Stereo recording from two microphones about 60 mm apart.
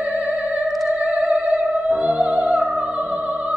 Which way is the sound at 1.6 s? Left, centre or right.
Centre.